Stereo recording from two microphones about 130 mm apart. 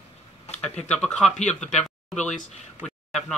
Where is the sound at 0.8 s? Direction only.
5° left (ahead or behind).